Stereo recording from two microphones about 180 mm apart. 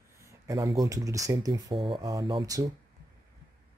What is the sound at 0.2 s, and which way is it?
Speech, 15° right (ahead or behind).